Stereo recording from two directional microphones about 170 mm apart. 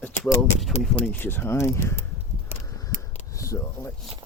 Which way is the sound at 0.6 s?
Centre (ahead or behind).